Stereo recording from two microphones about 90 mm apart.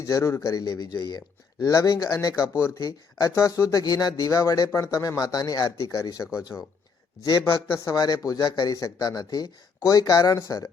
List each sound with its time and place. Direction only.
0.0 s speech: 35° left (ahead or behind)
2.5 s speech: 30° left (ahead or behind); by 5.7 s 45° left (ahead or behind)
5.7 s speech: 35° left (ahead or behind)
7.9 s speech: 45° left (ahead or behind)